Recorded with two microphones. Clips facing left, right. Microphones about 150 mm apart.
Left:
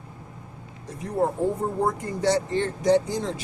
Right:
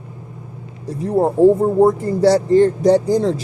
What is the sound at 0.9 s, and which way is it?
Speech, 35° right (ahead or behind).